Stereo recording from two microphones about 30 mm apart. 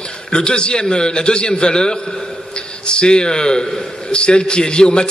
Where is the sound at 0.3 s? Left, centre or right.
Left.